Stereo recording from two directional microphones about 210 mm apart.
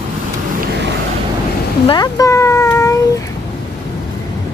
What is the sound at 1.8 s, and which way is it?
Speech, 20° left (ahead or behind).